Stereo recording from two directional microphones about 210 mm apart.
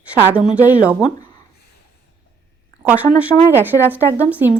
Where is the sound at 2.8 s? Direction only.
5° right (ahead or behind).